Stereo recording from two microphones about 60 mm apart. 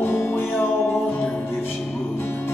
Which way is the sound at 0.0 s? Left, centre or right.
Left.